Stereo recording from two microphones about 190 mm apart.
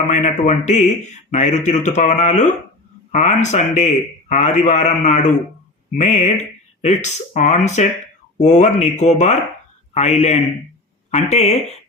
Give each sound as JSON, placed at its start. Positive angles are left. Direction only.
{"t": 0.1, "sound": "speech", "side_deg": 40}